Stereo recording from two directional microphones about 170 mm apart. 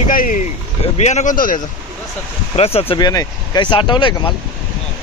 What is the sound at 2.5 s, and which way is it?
Speech, 35° left (ahead or behind).